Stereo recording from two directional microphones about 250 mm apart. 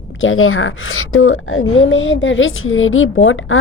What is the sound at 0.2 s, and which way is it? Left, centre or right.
A woman's voice, left.